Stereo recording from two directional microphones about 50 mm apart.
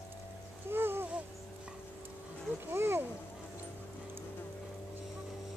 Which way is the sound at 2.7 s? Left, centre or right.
Right.